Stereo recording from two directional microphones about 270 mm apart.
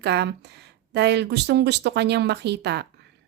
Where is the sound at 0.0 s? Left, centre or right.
Right.